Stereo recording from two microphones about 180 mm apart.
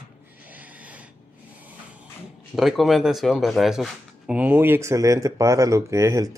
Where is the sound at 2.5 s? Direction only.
Centre (ahead or behind).